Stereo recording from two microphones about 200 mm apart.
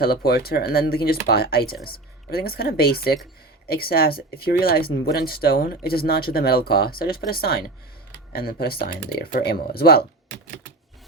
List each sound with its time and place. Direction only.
0.0 s speech: 50° left (ahead or behind)